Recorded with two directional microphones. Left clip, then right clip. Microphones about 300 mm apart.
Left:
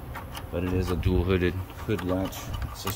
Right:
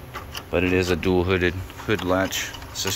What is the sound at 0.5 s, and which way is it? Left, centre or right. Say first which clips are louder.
Speech: right 9 dB; centre.